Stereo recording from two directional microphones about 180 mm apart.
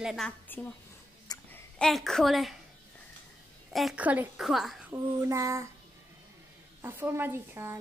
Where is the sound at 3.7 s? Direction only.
5° right (ahead or behind).